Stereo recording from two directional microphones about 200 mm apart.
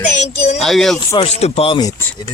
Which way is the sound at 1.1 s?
30° left (ahead or behind).